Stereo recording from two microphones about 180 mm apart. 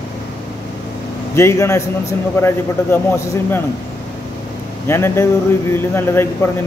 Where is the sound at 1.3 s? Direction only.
15° left (ahead or behind).